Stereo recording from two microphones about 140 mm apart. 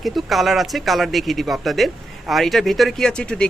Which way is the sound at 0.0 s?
Centre (ahead or behind).